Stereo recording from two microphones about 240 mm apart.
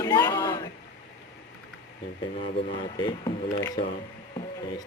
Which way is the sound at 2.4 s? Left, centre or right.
Left.